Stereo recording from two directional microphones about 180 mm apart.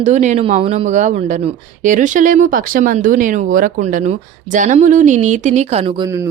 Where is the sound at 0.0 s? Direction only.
40° right (ahead or behind).